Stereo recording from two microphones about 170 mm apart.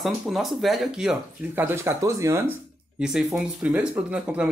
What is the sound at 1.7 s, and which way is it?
Speech, 15° right (ahead or behind).